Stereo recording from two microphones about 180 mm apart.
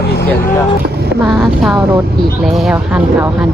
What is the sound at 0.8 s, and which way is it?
Vehicle, 65° right (ahead or behind).